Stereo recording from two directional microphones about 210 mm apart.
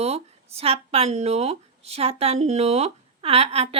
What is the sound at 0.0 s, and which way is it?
A woman's voice, 30° right (ahead or behind).